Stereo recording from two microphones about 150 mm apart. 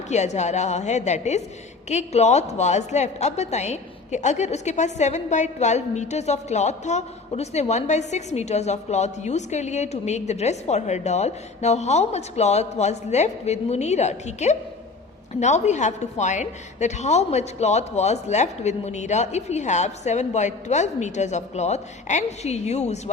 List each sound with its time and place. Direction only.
0.1 s a woman's voice: 50° left (ahead or behind)